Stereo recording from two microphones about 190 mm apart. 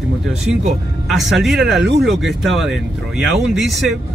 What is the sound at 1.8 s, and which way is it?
Speech, 65° right (ahead or behind).